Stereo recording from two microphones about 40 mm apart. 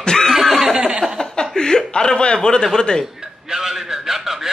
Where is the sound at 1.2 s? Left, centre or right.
Centre.